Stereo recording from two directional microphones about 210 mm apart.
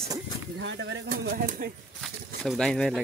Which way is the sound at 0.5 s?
60° right (ahead or behind).